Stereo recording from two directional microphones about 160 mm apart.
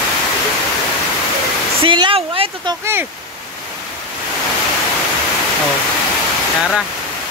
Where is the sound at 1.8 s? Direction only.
30° right (ahead or behind).